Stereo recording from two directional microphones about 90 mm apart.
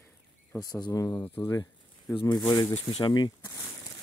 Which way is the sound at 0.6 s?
40° left (ahead or behind).